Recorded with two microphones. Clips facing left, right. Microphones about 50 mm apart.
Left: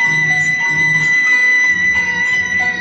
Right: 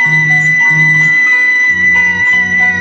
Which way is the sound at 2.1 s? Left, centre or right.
Right.